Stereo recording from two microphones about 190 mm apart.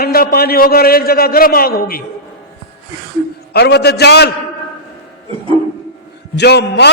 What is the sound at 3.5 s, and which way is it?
Speech, 60° left (ahead or behind).